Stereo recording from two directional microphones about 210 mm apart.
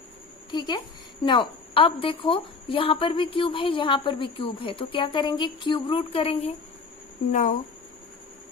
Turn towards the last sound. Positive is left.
turn(degrees=35)  # may be behind; listen again after turning